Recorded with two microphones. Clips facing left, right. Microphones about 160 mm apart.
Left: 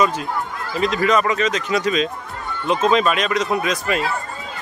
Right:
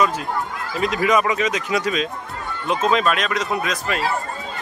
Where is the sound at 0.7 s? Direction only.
10° right (ahead or behind).